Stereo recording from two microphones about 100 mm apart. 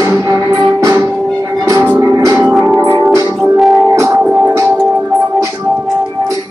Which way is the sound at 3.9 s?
30° right (ahead or behind).